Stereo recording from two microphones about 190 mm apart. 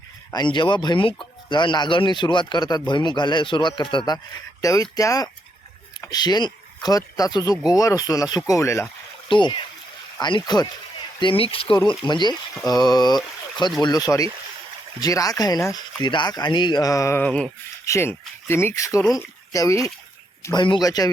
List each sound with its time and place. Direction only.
0.3 s speech: 20° left (ahead or behind)
9.3 s speech: 25° left (ahead or behind)